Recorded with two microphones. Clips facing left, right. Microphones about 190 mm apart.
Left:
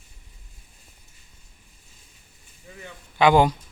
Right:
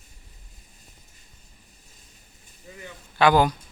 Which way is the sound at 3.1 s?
20° left (ahead or behind).